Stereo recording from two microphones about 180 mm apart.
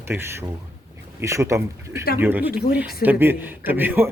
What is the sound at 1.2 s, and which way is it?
Speech, 15° right (ahead or behind).